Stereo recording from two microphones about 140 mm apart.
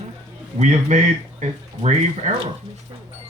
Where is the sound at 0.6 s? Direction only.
55° right (ahead or behind).